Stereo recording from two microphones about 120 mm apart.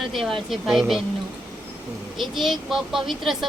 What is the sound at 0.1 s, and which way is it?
Speech, centre (ahead or behind).